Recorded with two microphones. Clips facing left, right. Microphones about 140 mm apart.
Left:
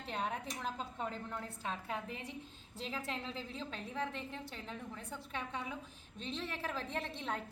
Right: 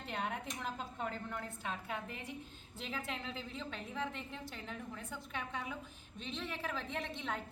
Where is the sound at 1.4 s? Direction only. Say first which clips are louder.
Even; 35° left (ahead or behind).